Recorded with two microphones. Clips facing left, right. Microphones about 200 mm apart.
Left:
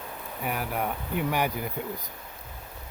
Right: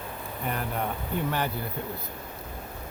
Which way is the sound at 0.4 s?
10° left (ahead or behind).